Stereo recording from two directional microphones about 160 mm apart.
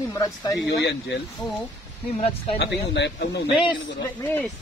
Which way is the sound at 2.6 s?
90° left.